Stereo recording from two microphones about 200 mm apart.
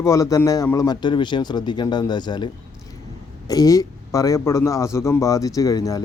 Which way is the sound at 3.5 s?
15° left (ahead or behind).